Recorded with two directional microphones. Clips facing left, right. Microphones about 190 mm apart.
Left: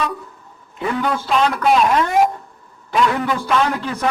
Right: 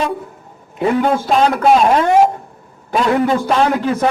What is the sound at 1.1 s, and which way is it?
A man's voice, 45° right (ahead or behind).